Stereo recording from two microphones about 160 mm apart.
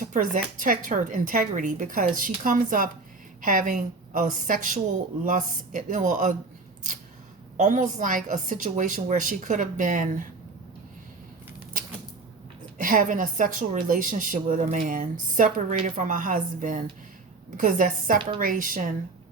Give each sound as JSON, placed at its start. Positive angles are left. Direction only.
{"t": 0.0, "sound": "a woman's voice", "side_deg": -55}
{"t": 7.5, "sound": "a woman's voice", "side_deg": -50}
{"t": 12.8, "sound": "a woman's voice", "side_deg": -55}